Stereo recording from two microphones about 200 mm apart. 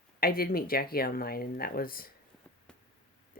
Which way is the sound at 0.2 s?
50° left (ahead or behind).